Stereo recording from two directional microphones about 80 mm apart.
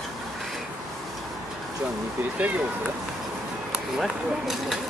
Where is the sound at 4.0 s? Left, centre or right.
Centre.